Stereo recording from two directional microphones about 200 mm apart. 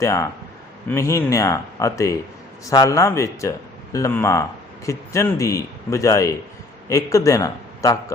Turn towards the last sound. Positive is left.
turn(degrees=15)  # may be behind; listen again after turning